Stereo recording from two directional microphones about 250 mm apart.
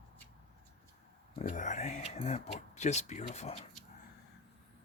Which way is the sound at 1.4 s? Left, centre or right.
Left.